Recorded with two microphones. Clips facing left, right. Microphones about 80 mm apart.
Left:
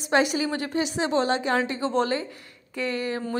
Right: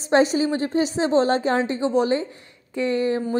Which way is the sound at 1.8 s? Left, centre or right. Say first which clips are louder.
Right 4 dB; centre.